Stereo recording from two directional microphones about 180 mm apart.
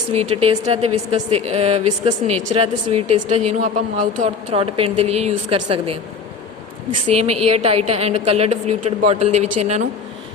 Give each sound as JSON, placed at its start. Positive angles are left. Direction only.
{"t": 0.1, "sound": "a woman's voice", "side_deg": -35}
{"t": 7.1, "sound": "a woman's voice", "side_deg": -35}